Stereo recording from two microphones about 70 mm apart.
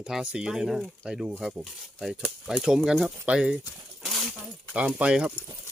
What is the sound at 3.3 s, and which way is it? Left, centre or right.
Speech, centre.